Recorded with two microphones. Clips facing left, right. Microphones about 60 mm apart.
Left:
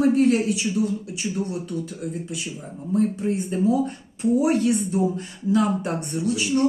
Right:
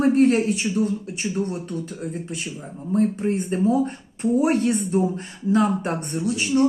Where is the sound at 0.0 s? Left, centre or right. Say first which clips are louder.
Right 1 dB; right.